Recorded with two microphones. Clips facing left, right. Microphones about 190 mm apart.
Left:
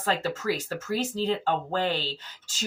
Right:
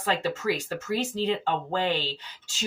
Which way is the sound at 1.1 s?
40° left (ahead or behind).